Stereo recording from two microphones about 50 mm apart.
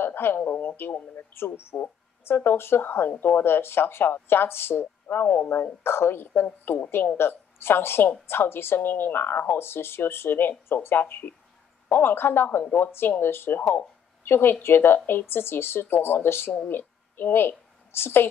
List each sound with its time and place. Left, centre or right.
0.0 s radio: left
0.4 s speech: left